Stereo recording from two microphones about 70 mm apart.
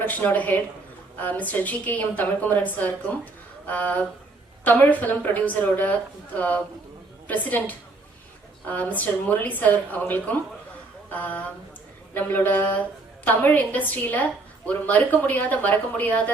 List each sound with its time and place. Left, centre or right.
0.0 s a woman's voice: left
3.7 s a woman's voice: left
11.1 s a woman's voice: left